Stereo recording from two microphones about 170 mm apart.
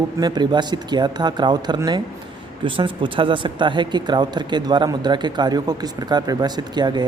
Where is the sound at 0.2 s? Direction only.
25° right (ahead or behind).